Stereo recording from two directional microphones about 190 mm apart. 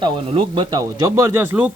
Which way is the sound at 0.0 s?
25° right (ahead or behind).